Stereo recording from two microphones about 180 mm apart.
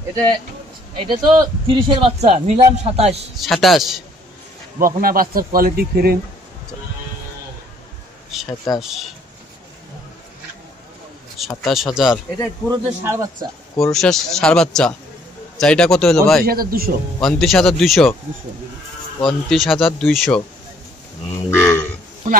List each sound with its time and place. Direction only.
0.9 s a man's voice: 25° right (ahead or behind)
3.3 s speech: centre (ahead or behind)
4.7 s speech: 50° right (ahead or behind)
8.3 s speech: centre (ahead or behind)
11.3 s speech: centre (ahead or behind)
12.6 s a man's voice: 15° right (ahead or behind)
13.7 s speech: centre (ahead or behind)
16.4 s a man's voice: 55° right (ahead or behind)
17.2 s speech: centre (ahead or behind)
19.1 s speech: centre (ahead or behind)
21.5 s speech: 15° left (ahead or behind)